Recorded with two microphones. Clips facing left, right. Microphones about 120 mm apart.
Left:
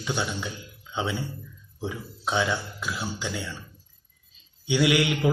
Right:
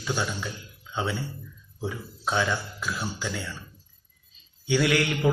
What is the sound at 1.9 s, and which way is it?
Speech, 15° left (ahead or behind).